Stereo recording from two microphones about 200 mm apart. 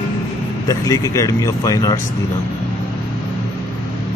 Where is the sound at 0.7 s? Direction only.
15° left (ahead or behind).